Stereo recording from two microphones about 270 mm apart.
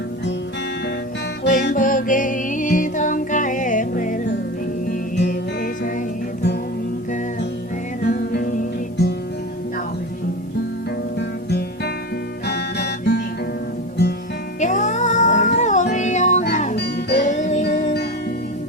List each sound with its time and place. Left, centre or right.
1.5 s music: left
8.0 s music: left
11.4 s music: left
12.5 s guitar: left
14.6 s music: left